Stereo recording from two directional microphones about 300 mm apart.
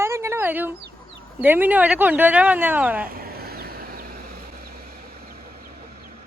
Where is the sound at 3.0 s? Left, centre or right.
Right.